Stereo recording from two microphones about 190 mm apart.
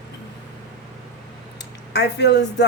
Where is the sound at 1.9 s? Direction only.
60° left (ahead or behind).